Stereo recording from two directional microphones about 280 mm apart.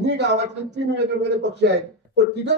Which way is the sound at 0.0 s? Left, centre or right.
Right.